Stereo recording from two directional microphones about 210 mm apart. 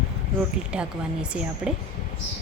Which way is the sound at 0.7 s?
5° right (ahead or behind).